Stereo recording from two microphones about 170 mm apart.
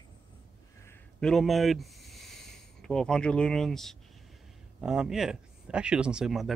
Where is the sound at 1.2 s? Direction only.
Centre (ahead or behind).